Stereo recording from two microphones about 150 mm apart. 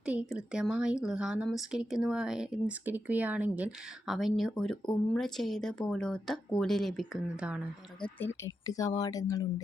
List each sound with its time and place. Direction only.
0.0 s speech: 10° right (ahead or behind)
8.2 s speech: 20° left (ahead or behind)